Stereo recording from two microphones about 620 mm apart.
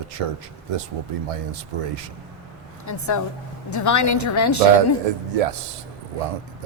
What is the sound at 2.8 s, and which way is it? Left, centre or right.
Speech, left.